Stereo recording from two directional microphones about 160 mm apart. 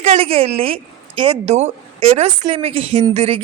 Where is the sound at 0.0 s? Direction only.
35° right (ahead or behind).